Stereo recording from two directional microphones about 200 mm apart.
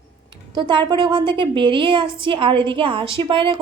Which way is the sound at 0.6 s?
20° right (ahead or behind).